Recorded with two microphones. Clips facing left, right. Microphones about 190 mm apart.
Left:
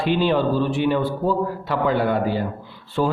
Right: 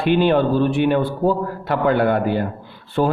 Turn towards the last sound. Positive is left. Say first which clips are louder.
# right 3 dB
turn(degrees=-55)  # may be behind; listen again after turning